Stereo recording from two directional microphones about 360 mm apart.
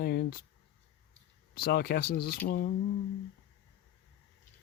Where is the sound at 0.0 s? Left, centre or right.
Left.